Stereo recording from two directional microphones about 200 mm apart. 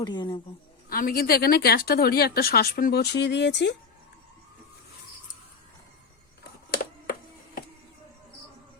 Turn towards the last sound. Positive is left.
turn(degrees=50)  # may be behind; listen again after turning